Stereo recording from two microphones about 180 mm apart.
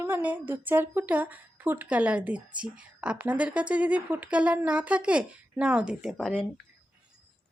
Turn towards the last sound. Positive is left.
turn(degrees=5)  # may be behind; listen again after turning